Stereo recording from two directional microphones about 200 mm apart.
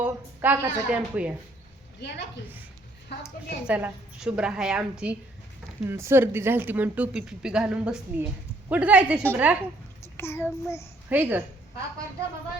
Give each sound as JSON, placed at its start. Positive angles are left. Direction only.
{"t": 0.0, "sound": "a woman's voice", "side_deg": -10}
{"t": 2.0, "sound": "a woman's voice", "side_deg": 60}
{"t": 3.2, "sound": "a woman's voice", "side_deg": -5}
{"t": 10.0, "sound": "a child's voice", "side_deg": 15}
{"t": 11.1, "sound": "speech", "side_deg": -10}